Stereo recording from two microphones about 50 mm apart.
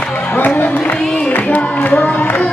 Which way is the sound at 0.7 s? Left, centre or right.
Left.